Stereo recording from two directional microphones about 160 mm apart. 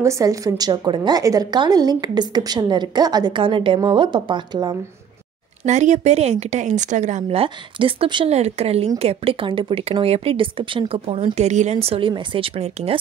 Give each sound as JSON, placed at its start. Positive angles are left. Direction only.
{"t": 0.0, "sound": "a woman's voice", "side_deg": -20}
{"t": 5.7, "sound": "speech", "side_deg": -45}